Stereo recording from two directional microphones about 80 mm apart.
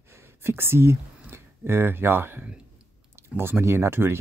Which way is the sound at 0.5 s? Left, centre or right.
Right.